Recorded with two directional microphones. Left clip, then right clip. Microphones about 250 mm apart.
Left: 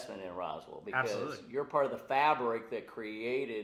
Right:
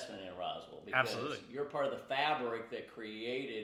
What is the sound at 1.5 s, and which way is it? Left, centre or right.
Speech, left.